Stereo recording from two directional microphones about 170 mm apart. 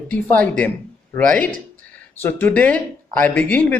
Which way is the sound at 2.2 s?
10° left (ahead or behind).